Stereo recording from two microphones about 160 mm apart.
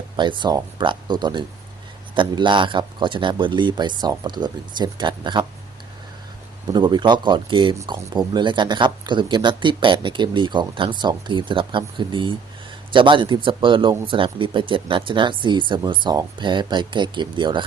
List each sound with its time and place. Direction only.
0.2 s speech: 30° right (ahead or behind)
6.7 s speech: 30° right (ahead or behind)